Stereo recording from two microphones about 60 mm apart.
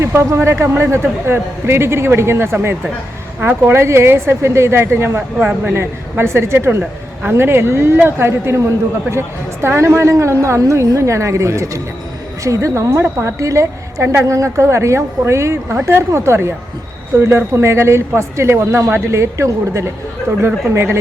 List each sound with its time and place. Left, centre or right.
0.0 s speech: right
5.4 s speech: right
5.7 s speech: right
6.7 s a woman's voice: right